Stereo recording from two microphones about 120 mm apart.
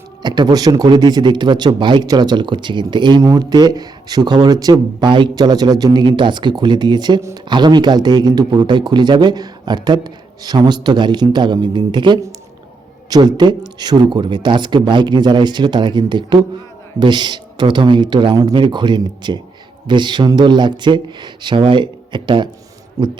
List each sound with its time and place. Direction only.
0.2 s speech: 35° right (ahead or behind)
23.0 s speech: 30° right (ahead or behind)